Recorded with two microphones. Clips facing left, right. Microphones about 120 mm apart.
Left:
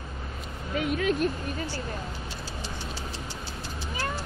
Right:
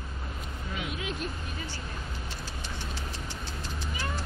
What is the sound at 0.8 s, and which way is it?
Speech, 50° left (ahead or behind).